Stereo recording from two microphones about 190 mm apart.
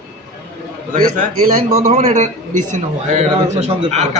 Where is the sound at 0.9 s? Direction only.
45° right (ahead or behind).